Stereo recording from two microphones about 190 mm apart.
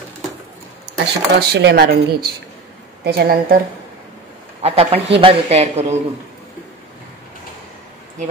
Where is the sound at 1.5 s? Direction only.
60° right (ahead or behind).